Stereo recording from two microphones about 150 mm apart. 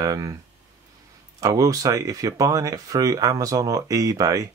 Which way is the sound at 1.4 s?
20° right (ahead or behind).